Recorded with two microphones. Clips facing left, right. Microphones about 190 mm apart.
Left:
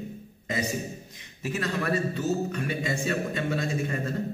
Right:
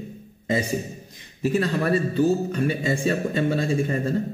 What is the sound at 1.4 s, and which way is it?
A man's voice, 30° right (ahead or behind).